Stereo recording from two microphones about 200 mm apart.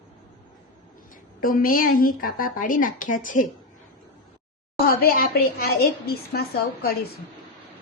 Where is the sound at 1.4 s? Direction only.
45° left (ahead or behind).